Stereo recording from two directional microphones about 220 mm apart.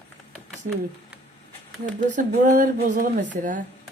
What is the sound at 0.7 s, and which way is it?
Speech, 35° right (ahead or behind).